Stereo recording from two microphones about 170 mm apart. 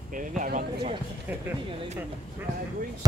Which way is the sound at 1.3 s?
10° right (ahead or behind).